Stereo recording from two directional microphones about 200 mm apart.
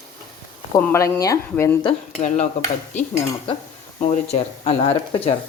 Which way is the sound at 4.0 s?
35° left (ahead or behind).